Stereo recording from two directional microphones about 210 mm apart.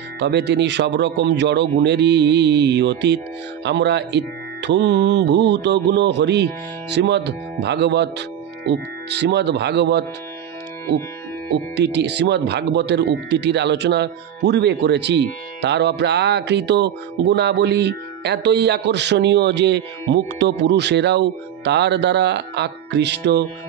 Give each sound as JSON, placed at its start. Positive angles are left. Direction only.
{"t": 0.2, "sound": "speech", "side_deg": -55}
{"t": 11.7, "sound": "speech", "side_deg": -55}